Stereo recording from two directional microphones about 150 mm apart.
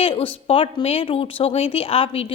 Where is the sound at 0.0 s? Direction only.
40° left (ahead or behind).